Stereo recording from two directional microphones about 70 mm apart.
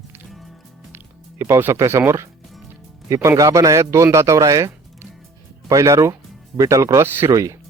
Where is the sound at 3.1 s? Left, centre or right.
Right.